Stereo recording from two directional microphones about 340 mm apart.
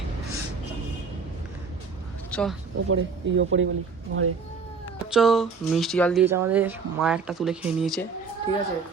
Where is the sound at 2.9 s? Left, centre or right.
Right.